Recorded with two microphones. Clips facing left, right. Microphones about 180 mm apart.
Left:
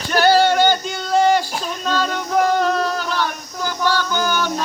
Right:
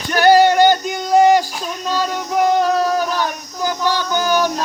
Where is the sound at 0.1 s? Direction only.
10° right (ahead or behind).